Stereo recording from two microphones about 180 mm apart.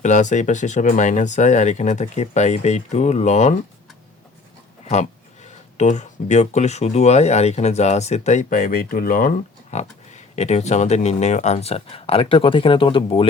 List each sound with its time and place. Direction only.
0.0 s speech: 40° left (ahead or behind)
5.7 s speech: 40° left (ahead or behind)
9.7 s speech: 40° left (ahead or behind)